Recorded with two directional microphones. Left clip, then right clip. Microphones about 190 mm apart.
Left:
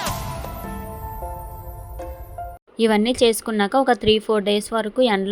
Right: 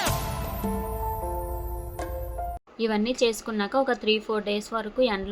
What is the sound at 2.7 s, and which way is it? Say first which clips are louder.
Speech: left 8 dB; 45° left (ahead or behind).